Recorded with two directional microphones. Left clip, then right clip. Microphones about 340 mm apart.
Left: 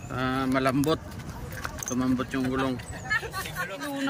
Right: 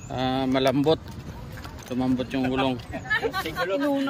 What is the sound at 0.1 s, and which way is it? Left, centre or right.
Speech, centre.